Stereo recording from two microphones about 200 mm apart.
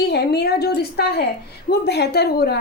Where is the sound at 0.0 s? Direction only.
55° left (ahead or behind).